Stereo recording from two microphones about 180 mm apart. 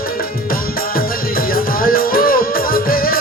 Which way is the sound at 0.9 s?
55° left (ahead or behind).